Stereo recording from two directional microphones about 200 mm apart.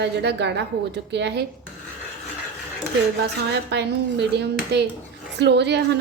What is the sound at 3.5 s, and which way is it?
A woman's voice, 55° right (ahead or behind).